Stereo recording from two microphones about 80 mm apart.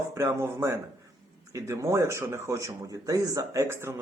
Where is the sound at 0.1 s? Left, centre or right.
Right.